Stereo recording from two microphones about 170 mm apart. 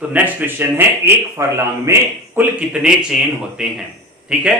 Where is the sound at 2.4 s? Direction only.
5° right (ahead or behind).